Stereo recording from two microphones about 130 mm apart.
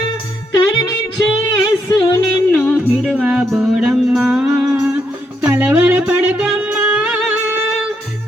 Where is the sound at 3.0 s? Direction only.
Centre (ahead or behind).